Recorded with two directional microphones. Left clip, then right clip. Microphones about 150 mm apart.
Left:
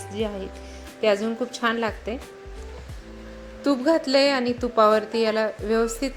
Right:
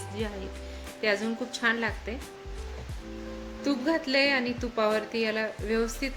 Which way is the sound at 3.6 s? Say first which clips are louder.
Left 7 dB; 30° left (ahead or behind).